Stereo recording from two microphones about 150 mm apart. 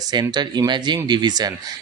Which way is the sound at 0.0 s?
25° right (ahead or behind).